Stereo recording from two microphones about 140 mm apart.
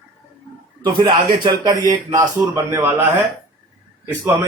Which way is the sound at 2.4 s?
15° right (ahead or behind).